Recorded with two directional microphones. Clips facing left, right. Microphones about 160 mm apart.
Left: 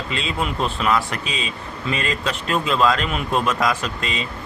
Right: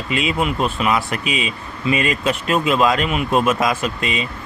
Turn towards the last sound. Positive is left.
turn(degrees=-15)  # may be behind; listen again after turning